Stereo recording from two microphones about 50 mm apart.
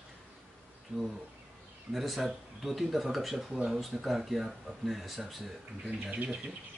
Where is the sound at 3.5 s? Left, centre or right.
Centre.